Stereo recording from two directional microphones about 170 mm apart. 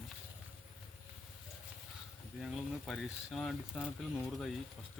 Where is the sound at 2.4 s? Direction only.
Centre (ahead or behind).